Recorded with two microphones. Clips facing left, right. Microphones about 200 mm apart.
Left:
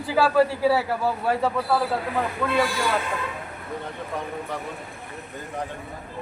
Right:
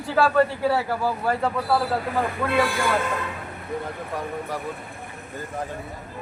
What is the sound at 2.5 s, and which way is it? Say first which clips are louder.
Speech: right 1 dB; 60° right (ahead or behind).